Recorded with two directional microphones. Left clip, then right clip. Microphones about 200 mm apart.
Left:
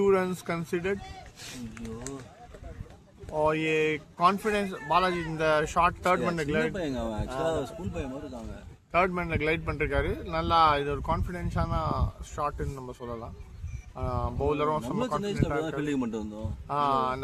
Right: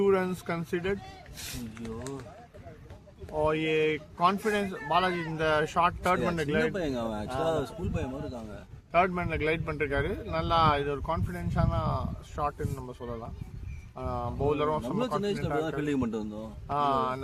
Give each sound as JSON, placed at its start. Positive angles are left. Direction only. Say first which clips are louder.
{"t": 0.0, "sound": "a man's voice", "louder": "left 1 dB", "side_deg": 20}
{"t": 3.3, "sound": "a man's voice", "louder": "left 1 dB", "side_deg": 25}
{"t": 6.7, "sound": "a man's voice", "louder": "right 1 dB", "side_deg": -15}
{"t": 8.9, "sound": "a man's voice", "louder": "even", "side_deg": 25}
{"t": 15.8, "sound": "a man's voice", "louder": "even", "side_deg": -10}
{"t": 16.6, "sound": "a man's voice", "louder": "left 1 dB", "side_deg": 25}